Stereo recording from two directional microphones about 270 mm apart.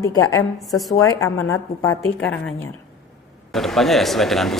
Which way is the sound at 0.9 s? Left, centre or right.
Centre.